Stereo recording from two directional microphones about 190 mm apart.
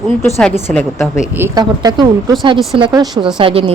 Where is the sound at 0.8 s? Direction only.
5° left (ahead or behind).